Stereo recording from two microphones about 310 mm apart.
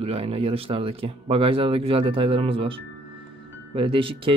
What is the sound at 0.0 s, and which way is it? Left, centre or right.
Speech, centre.